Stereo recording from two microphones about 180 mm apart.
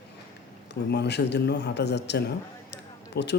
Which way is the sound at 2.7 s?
70° left (ahead or behind).